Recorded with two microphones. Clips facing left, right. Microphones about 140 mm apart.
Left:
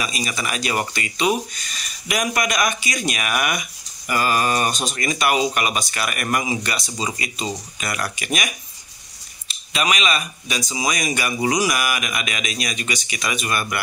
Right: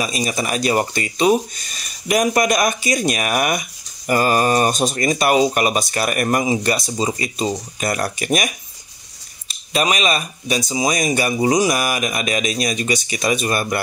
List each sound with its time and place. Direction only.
0.0 s speech: 35° right (ahead or behind)
9.7 s speech: 40° right (ahead or behind)